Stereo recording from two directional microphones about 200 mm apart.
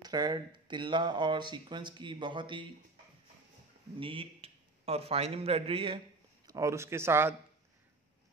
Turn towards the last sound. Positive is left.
turn(degrees=-10)  # may be behind; listen again after turning